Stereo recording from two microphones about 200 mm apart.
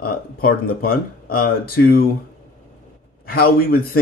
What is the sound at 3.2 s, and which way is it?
Speech, 50° left (ahead or behind).